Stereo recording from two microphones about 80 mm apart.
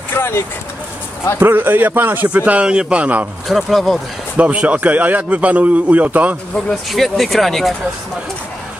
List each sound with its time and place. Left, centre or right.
0.1 s vehicle: left
1.4 s a man's voice: right
3.4 s speech: centre
4.4 s a man's voice: centre
6.9 s speech: centre